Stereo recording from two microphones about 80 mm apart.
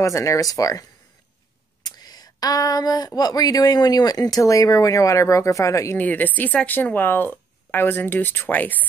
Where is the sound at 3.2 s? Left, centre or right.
Left.